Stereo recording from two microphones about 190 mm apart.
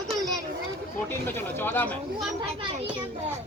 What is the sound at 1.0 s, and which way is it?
Speech, 10° left (ahead or behind).